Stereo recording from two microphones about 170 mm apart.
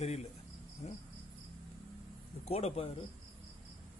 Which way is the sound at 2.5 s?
35° left (ahead or behind).